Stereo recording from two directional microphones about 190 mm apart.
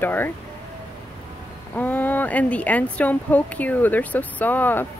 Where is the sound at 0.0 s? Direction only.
10° left (ahead or behind).